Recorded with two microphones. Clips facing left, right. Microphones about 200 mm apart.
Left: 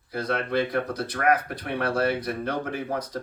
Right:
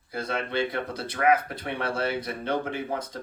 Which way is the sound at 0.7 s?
25° right (ahead or behind).